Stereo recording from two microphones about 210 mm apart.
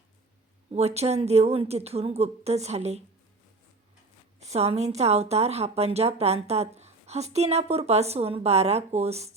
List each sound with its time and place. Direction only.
0.7 s a woman's voice: 30° right (ahead or behind)
4.4 s a woman's voice: 30° right (ahead or behind)